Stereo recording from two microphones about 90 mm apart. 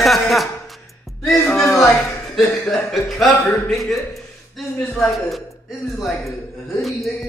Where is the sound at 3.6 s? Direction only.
Centre (ahead or behind).